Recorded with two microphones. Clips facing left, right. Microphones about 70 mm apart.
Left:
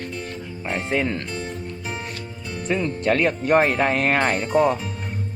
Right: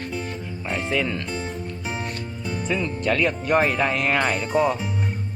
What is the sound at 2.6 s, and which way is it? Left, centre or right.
Speech, left.